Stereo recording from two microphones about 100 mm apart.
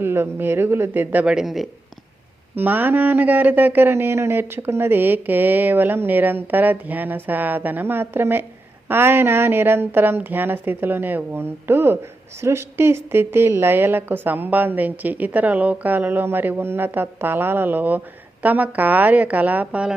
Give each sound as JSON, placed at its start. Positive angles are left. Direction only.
{"t": 0.0, "sound": "speech", "side_deg": -25}
{"t": 2.6, "sound": "a woman's voice", "side_deg": -20}